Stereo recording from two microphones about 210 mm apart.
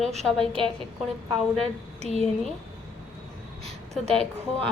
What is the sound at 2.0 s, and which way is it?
Speech, 30° left (ahead or behind).